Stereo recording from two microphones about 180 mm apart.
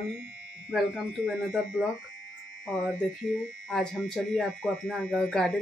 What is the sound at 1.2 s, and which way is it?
Speech, 5° right (ahead or behind).